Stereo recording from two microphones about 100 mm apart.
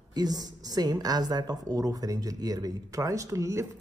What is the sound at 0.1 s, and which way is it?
A woman's voice, 40° right (ahead or behind).